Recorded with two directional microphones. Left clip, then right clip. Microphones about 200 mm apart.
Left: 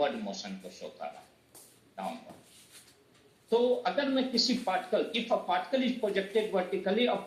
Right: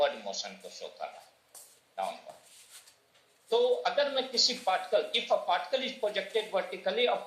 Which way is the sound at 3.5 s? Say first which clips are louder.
Even; 35° right (ahead or behind).